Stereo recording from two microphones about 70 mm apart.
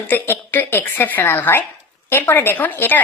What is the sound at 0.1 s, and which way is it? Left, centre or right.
A woman's voice, left.